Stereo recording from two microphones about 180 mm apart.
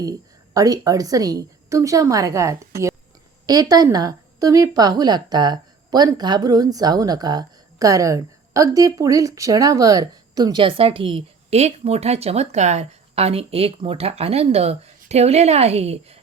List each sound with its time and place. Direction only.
0.0 s a woman's voice: 20° right (ahead or behind); by 16.1 s 35° right (ahead or behind)